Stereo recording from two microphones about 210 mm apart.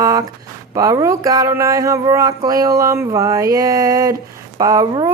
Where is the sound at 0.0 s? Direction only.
15° right (ahead or behind).